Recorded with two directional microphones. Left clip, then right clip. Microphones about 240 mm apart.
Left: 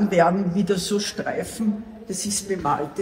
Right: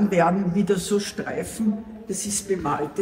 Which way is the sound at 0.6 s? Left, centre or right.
Centre.